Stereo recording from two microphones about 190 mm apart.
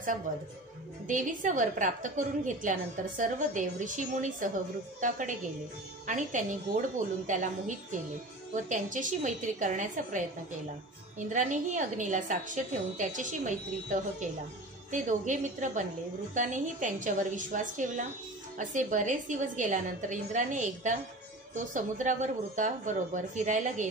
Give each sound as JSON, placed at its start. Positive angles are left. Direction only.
{"t": 0.3, "sound": "a woman's voice", "side_deg": -45}
{"t": 6.0, "sound": "a woman's voice", "side_deg": -45}